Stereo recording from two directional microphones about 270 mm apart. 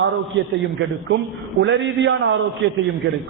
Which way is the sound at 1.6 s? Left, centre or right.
Right.